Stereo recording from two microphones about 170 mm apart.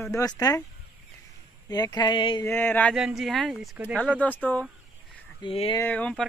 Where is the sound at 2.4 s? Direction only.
15° left (ahead or behind).